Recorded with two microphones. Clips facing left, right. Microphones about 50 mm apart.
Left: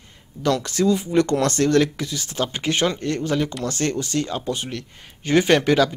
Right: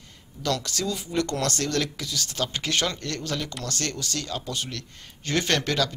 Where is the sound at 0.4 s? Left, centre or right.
Left.